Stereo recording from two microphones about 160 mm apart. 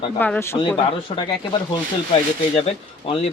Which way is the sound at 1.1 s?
35° left (ahead or behind).